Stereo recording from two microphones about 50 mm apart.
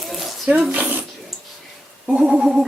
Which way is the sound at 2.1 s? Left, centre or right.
Centre.